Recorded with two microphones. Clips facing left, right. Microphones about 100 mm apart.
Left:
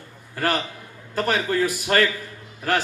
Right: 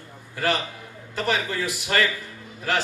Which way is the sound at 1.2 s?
45° left (ahead or behind).